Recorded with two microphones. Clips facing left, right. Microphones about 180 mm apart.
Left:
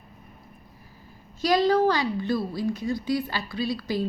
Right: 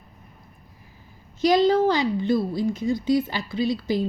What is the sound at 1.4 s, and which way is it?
A woman's voice, 20° right (ahead or behind).